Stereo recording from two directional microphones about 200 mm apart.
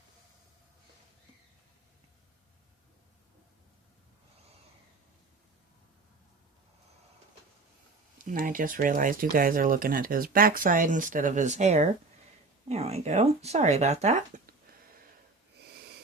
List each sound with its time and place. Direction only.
8.2 s speech: 45° right (ahead or behind)